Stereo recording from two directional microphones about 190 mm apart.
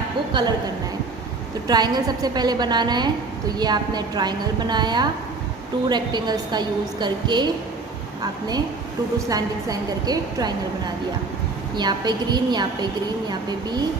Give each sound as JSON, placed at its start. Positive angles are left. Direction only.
{"t": 0.3, "sound": "a woman's voice", "side_deg": -25}
{"t": 1.7, "sound": "a woman's voice", "side_deg": -20}
{"t": 11.7, "sound": "a woman's voice", "side_deg": -20}